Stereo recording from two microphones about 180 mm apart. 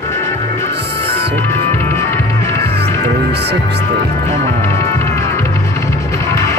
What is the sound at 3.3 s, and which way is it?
Music, 65° right (ahead or behind).